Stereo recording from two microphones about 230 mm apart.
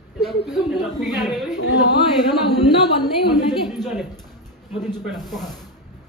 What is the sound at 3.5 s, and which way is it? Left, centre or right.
Speech, centre.